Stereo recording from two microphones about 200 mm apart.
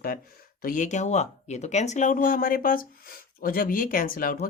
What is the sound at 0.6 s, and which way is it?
Speech, 40° left (ahead or behind).